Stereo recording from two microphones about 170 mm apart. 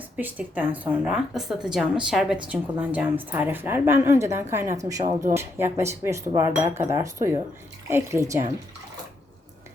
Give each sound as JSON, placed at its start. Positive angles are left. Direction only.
{"t": 0.2, "sound": "a woman's voice", "side_deg": -10}